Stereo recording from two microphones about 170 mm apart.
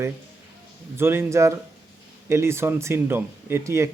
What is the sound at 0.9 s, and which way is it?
Speech, 15° right (ahead or behind).